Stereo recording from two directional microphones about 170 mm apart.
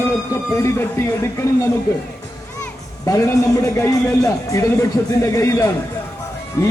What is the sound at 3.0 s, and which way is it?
A man's voice, 20° left (ahead or behind).